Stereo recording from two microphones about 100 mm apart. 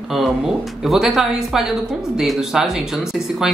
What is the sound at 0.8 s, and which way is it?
Speech, centre (ahead or behind).